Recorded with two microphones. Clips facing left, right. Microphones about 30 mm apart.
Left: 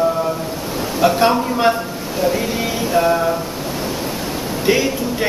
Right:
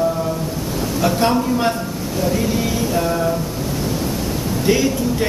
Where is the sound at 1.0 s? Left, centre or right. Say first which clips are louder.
Left 3 dB; centre.